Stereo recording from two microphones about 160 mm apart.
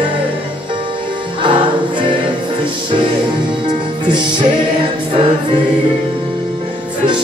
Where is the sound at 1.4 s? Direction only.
30° right (ahead or behind).